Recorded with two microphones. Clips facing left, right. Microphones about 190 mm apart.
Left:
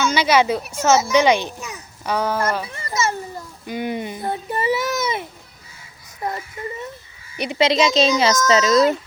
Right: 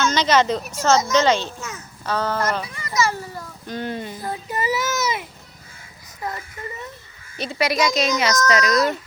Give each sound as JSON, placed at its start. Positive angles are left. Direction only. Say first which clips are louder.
{"t": 0.0, "sound": "speech", "louder": "left 1 dB", "side_deg": 10}
{"t": 2.9, "sound": "speech", "louder": "right 1 dB", "side_deg": 25}
{"t": 3.7, "sound": "speech", "louder": "left 3 dB", "side_deg": 15}
{"t": 7.3, "sound": "speech", "louder": "left 4 dB", "side_deg": 15}